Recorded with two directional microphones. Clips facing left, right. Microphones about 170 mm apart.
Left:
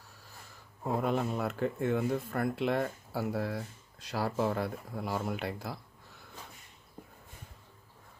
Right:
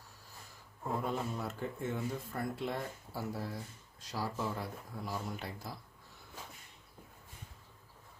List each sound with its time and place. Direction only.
0.9 s speech: 70° left (ahead or behind)